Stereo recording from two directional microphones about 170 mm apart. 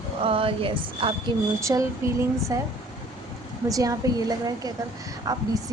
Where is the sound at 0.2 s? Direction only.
30° right (ahead or behind).